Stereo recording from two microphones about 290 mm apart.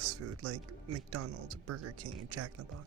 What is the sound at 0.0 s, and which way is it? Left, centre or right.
Speech, right.